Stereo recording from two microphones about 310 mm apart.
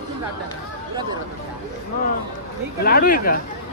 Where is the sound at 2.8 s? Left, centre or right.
Left.